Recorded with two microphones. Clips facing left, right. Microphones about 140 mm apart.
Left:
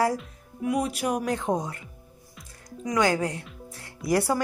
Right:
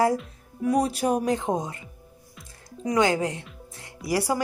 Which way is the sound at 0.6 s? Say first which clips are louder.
Right 3 dB; 35° right (ahead or behind).